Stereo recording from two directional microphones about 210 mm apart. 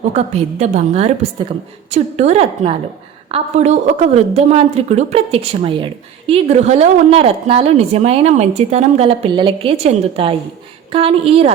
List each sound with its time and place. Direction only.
0.1 s a woman's voice: 30° right (ahead or behind)